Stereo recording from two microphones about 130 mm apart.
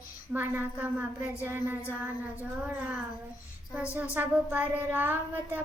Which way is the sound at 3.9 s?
10° right (ahead or behind).